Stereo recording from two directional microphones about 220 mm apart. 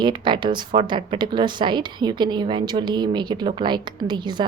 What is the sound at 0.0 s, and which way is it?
Speech, 20° right (ahead or behind).